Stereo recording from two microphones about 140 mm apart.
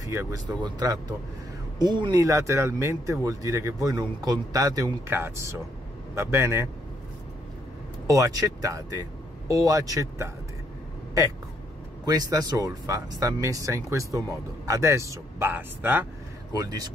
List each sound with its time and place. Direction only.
0.0 s speech: 20° right (ahead or behind)
8.1 s speech: 25° right (ahead or behind)
12.0 s speech: 30° right (ahead or behind)
16.5 s speech: 25° right (ahead or behind)